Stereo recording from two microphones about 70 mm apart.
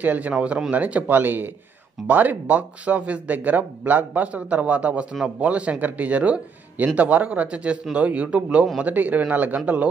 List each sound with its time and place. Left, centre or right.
0.0 s speech: right